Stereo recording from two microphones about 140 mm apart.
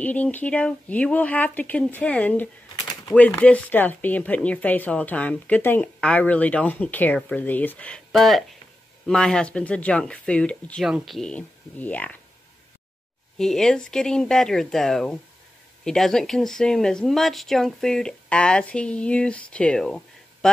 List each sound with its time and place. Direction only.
0.0 s speech: 10° left (ahead or behind)
2.7 s typewriter: 30° left (ahead or behind)
3.2 s speech: 10° left (ahead or behind)
13.4 s speech: 5° left (ahead or behind)